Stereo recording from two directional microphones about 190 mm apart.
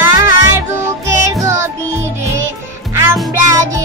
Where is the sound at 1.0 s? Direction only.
15° right (ahead or behind).